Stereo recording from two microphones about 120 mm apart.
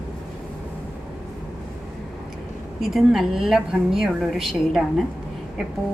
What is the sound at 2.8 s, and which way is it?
A woman's voice, centre (ahead or behind).